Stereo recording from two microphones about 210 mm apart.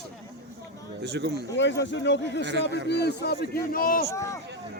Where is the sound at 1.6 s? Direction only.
60° left (ahead or behind); by 4.0 s 40° left (ahead or behind).